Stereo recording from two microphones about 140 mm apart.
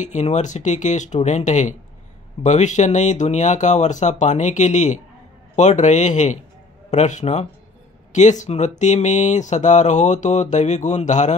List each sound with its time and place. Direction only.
0.0 s speech: 55° left (ahead or behind)